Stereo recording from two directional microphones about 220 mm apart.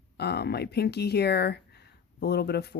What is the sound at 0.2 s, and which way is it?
Speech, 50° left (ahead or behind).